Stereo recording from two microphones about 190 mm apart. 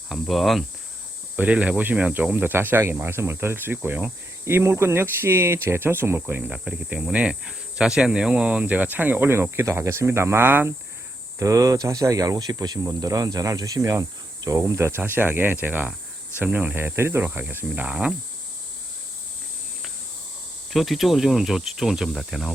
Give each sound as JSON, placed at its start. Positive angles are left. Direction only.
{"t": 0.1, "sound": "speech", "side_deg": 0}
{"t": 20.7, "sound": "speech", "side_deg": 0}